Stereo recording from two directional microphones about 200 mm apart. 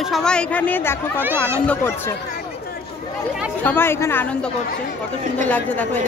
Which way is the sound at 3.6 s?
10° left (ahead or behind).